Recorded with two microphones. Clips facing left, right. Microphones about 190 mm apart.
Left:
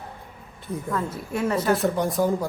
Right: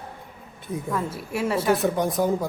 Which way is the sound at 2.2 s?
15° right (ahead or behind).